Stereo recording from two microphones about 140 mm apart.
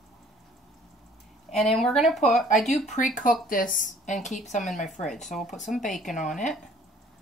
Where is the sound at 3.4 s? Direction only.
80° left; by 5.1 s 60° left (ahead or behind).